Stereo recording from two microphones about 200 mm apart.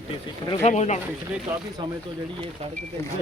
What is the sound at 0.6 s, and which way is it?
Speech, 35° left (ahead or behind).